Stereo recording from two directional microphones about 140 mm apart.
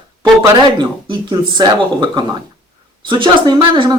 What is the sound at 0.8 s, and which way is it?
Speech, 30° right (ahead or behind).